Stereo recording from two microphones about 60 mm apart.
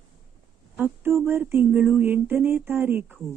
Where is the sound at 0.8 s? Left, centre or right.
Right.